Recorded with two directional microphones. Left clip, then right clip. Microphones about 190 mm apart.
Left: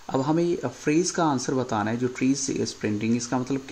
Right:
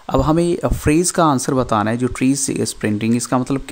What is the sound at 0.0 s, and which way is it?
Speech, 45° right (ahead or behind).